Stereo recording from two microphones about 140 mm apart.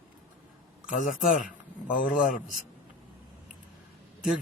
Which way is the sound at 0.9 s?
65° left (ahead or behind).